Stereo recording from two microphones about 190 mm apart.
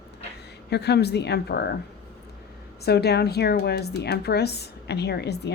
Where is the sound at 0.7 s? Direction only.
60° left (ahead or behind).